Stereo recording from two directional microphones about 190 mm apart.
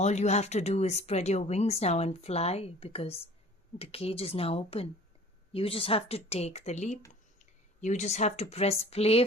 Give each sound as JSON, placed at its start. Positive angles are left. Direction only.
{"t": 0.0, "sound": "speech", "side_deg": 35}